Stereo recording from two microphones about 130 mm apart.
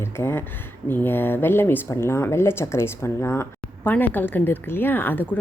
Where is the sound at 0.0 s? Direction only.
20° left (ahead or behind).